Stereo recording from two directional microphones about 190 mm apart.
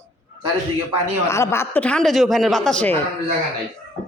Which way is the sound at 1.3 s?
15° left (ahead or behind).